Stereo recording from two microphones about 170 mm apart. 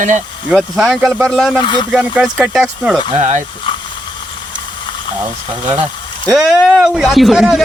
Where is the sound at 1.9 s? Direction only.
5° right (ahead or behind).